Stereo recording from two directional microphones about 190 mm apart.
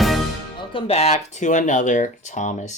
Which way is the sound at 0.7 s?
30° left (ahead or behind).